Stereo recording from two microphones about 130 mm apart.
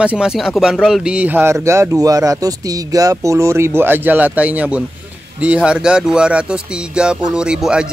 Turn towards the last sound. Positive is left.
turn(degrees=-5)  # may be behind; listen again after turning